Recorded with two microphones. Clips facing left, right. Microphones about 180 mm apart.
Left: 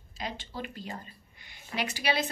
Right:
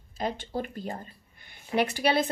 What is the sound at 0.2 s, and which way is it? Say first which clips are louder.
Speech: right 7 dB; 50° right (ahead or behind).